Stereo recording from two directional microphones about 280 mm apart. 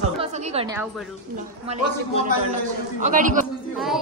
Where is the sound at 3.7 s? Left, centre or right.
Centre.